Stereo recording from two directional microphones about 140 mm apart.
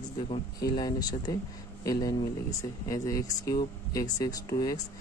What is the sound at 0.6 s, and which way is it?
Speech, 30° left (ahead or behind).